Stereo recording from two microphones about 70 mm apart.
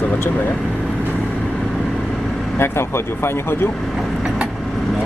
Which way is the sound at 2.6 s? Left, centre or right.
Left.